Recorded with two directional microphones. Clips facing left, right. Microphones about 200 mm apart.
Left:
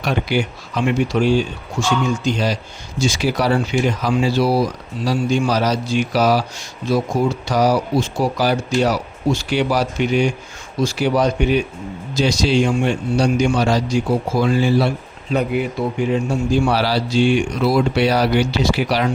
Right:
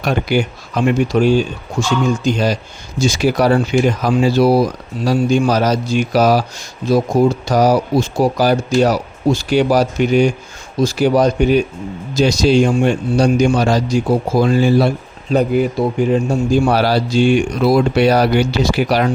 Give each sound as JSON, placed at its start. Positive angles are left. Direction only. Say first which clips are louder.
{"t": 0.0, "sound": "speech", "louder": "right 3 dB", "side_deg": -45}